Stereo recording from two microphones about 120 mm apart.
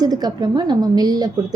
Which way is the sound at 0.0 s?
35° right (ahead or behind).